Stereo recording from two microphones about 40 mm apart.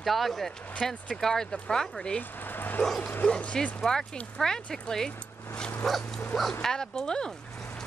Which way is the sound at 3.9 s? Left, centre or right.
Centre.